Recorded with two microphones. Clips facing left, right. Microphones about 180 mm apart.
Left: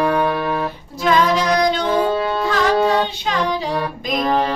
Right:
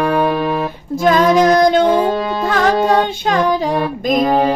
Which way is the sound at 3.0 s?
50° right (ahead or behind).